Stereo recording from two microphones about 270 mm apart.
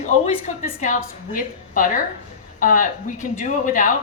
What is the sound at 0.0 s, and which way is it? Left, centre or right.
Speech, left.